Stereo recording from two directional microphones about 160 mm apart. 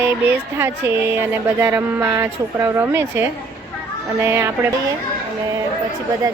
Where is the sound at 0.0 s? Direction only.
15° right (ahead or behind).